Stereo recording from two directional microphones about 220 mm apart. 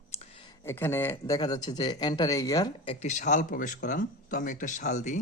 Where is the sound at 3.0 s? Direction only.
30° left (ahead or behind).